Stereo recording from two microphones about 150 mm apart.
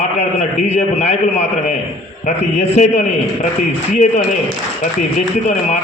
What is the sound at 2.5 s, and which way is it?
Speech, 50° left (ahead or behind).